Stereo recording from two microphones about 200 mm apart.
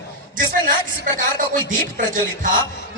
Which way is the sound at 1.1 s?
40° right (ahead or behind).